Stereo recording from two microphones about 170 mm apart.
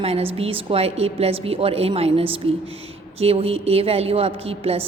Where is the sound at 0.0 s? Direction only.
35° right (ahead or behind).